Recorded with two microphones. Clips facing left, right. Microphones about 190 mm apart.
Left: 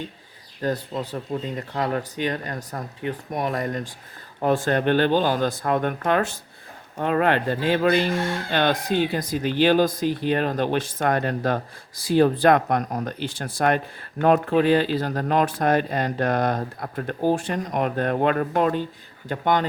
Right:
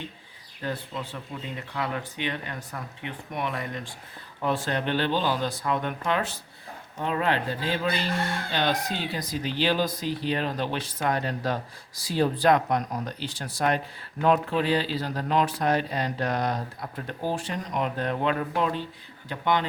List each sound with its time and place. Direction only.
0.6 s speech: 40° left (ahead or behind)